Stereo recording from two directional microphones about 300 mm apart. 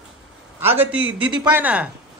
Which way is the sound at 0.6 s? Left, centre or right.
Centre.